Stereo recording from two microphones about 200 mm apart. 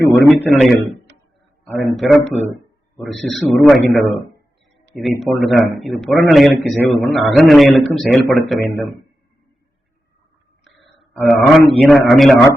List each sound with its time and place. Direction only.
0.1 s a man's voice: 5° right (ahead or behind)
1.1 s a sound: 60° right (ahead or behind)
1.6 s a man's voice: centre (ahead or behind)
5.2 s a man's voice: centre (ahead or behind)
11.1 s a man's voice: centre (ahead or behind)